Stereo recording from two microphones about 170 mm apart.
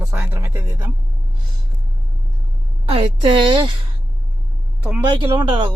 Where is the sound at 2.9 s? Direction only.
30° right (ahead or behind).